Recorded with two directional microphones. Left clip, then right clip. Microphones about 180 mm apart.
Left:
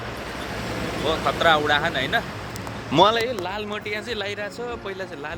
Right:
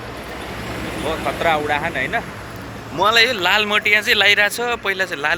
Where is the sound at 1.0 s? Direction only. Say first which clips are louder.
Even; 15° left (ahead or behind).